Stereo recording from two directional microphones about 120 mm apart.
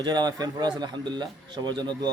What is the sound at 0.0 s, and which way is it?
Speech, 35° right (ahead or behind).